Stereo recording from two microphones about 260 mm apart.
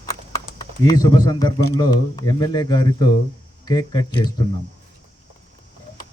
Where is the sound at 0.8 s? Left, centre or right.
Centre.